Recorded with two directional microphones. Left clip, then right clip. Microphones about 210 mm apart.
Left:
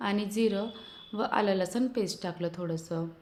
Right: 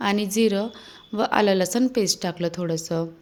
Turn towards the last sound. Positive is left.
turn(degrees=-40)  # may be behind; listen again after turning